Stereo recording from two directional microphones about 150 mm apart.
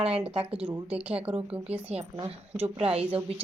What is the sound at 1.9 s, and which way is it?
A woman's voice, 40° right (ahead or behind).